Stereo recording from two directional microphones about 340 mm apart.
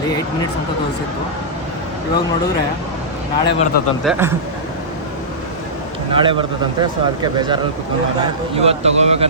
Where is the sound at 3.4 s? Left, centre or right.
Centre.